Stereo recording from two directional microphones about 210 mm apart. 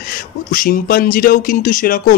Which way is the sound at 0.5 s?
40° left (ahead or behind).